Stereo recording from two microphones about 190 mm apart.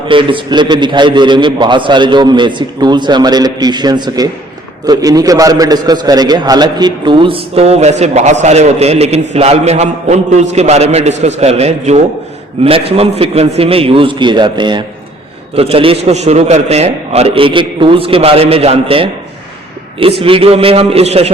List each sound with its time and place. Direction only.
0.1 s a man's voice: 25° right (ahead or behind)